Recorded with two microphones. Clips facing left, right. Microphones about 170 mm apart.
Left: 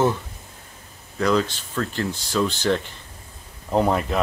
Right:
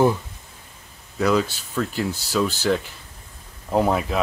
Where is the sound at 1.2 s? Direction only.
10° right (ahead or behind).